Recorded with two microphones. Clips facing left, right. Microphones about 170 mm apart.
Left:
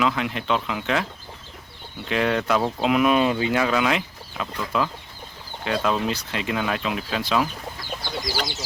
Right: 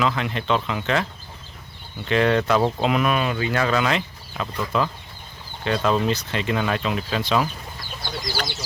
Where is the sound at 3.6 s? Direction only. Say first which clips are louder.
Even; 5° left (ahead or behind).